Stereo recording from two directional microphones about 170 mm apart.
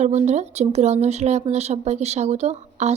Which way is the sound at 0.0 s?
40° right (ahead or behind).